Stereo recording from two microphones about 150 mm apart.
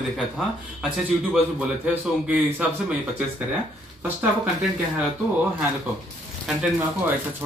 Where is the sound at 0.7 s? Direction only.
5° right (ahead or behind).